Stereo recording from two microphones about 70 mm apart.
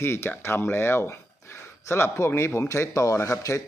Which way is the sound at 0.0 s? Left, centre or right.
Left.